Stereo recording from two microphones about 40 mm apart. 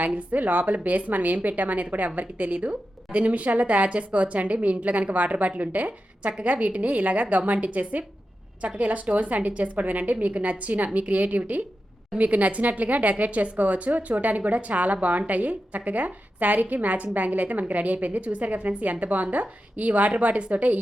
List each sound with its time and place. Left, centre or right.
0.0 s speech: right